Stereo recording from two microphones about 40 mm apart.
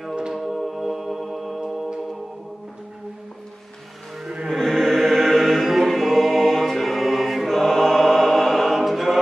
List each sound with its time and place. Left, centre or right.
0.3 s music: centre
1.6 s music: centre
4.5 s choir: centre